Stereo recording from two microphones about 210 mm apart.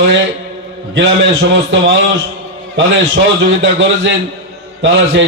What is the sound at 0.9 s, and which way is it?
A man's voice, 60° right (ahead or behind).